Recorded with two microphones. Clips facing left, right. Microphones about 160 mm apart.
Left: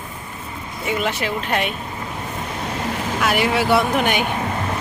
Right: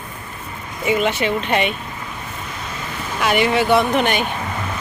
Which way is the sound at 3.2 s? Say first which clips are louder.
Right 3 dB; centre (ahead or behind).